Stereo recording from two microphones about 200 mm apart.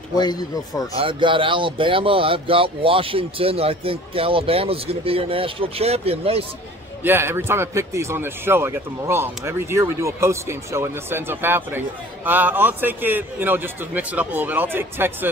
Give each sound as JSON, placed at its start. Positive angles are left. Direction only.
{"t": 0.2, "sound": "speech", "side_deg": 20}
{"t": 0.9, "sound": "speech", "side_deg": -25}
{"t": 7.0, "sound": "speech", "side_deg": -10}